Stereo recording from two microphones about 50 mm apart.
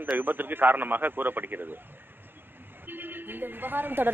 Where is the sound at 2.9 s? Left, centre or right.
Right.